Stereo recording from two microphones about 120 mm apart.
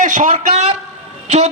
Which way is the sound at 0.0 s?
90° right.